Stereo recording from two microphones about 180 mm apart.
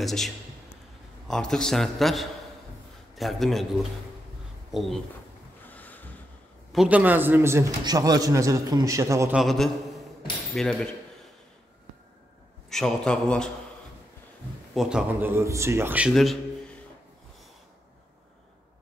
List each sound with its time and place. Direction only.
0.0 s a man's voice: centre (ahead or behind)
4.7 s a man's voice: centre (ahead or behind)
5.7 s a sound: 10° left (ahead or behind)
6.7 s a man's voice: 5° right (ahead or behind)
9.3 s a man's voice: centre (ahead or behind)
12.6 s a man's voice: centre (ahead or behind)
14.7 s a man's voice: centre (ahead or behind)